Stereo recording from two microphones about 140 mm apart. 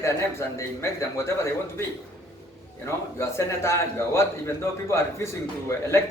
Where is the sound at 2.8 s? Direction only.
20° left (ahead or behind).